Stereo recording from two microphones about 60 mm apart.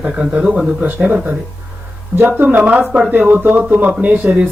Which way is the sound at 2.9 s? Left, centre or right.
Centre.